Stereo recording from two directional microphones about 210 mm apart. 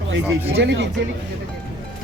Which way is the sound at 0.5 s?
60° right (ahead or behind).